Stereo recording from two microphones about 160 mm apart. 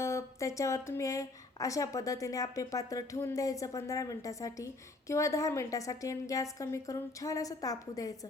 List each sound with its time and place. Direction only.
0.0 s a woman's voice: 15° left (ahead or behind)